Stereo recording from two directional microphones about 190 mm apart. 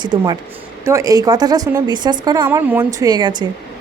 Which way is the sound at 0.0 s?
25° right (ahead or behind).